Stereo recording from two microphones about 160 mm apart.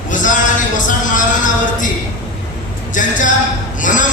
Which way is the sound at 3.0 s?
55° left (ahead or behind).